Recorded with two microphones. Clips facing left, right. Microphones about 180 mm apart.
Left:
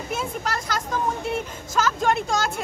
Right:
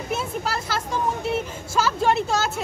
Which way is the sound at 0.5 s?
5° right (ahead or behind).